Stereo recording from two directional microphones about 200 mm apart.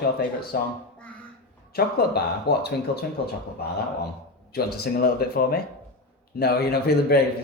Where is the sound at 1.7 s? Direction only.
55° left (ahead or behind).